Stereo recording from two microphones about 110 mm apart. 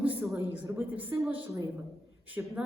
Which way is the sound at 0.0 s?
15° right (ahead or behind).